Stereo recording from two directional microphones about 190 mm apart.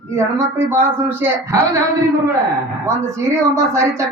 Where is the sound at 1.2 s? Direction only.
10° right (ahead or behind).